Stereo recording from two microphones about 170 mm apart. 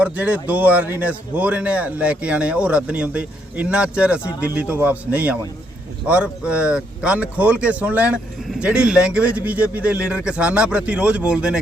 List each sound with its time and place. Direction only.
0.0 s speech: 10° right (ahead or behind)